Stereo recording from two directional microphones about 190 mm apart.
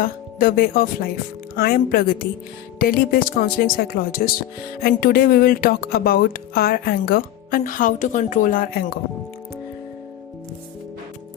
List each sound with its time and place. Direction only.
0.0 s speech: 50° left (ahead or behind)